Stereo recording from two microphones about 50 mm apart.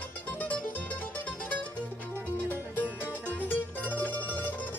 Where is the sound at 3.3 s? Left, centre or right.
Left.